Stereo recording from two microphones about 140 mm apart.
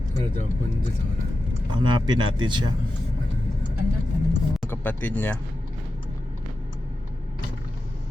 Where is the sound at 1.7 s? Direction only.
35° right (ahead or behind).